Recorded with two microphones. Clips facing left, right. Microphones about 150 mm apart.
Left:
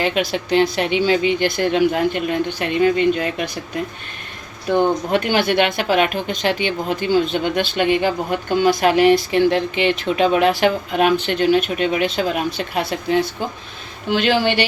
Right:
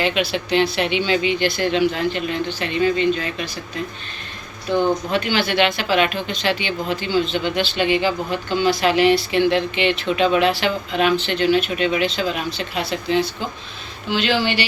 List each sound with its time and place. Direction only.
0.0 s a woman's voice: 45° left (ahead or behind)
5.1 s a woman's voice: 55° left (ahead or behind)